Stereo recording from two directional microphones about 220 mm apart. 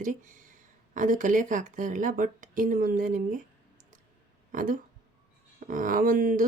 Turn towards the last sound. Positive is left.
turn(degrees=-40)  # may be behind; listen again after turning